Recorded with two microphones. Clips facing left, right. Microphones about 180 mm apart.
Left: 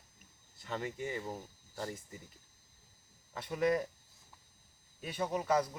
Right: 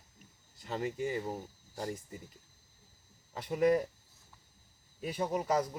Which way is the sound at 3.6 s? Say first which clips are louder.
Right 4 dB; 10° right (ahead or behind).